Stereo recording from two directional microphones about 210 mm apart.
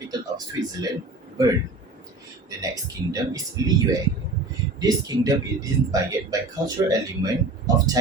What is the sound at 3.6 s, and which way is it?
Speech, 15° right (ahead or behind).